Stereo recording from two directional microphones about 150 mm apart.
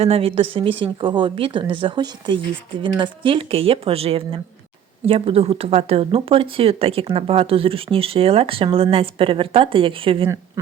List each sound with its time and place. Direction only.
0.0 s speech: 40° right (ahead or behind)
10.2 s speech: 20° right (ahead or behind)